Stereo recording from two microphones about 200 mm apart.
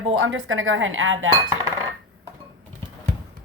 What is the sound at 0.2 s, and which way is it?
Cutlery, 80° right.